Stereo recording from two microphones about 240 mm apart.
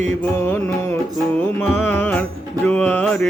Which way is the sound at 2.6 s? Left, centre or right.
Centre.